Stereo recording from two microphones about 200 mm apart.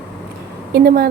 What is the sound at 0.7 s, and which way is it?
Speech, 50° right (ahead or behind).